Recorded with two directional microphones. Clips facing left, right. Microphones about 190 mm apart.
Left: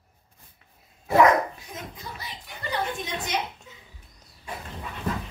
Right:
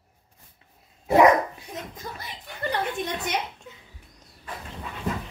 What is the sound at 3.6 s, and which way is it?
Cough, 60° right (ahead or behind).